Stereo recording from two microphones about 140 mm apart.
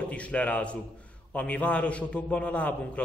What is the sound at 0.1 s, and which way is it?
A man's voice, 10° left (ahead or behind).